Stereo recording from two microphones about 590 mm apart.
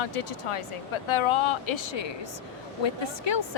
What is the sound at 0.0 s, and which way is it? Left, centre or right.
A woman's voice, left.